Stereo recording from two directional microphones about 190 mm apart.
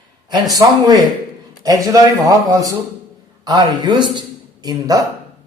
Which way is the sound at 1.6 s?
20° right (ahead or behind).